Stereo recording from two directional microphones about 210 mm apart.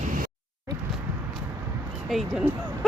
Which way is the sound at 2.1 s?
Centre (ahead or behind).